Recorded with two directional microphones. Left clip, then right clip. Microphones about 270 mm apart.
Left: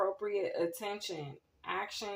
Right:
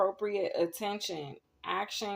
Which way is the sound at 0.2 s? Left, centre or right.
Right.